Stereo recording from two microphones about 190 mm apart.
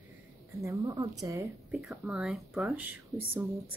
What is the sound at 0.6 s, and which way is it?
Speech, 15° right (ahead or behind).